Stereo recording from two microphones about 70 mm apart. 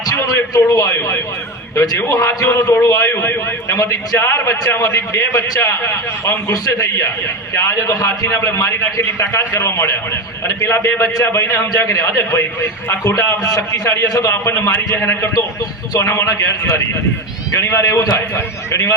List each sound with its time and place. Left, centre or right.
0.1 s a man's voice: left
3.2 s a man's voice: left
3.8 s a man's voice: left
14.4 s a man's voice: left
17.6 s a man's voice: left
18.3 s a man's voice: left